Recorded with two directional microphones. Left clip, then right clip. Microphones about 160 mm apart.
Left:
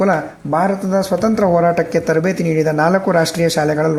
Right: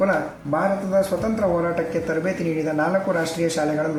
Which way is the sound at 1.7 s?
45° left (ahead or behind).